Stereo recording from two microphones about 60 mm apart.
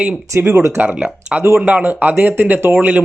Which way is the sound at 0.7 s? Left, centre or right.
Right.